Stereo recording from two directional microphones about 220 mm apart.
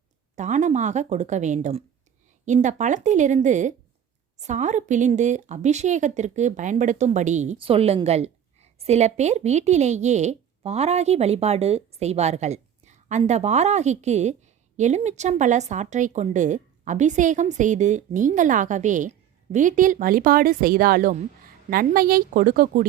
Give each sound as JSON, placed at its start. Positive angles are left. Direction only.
{"t": 0.3, "sound": "a woman's voice", "side_deg": -35}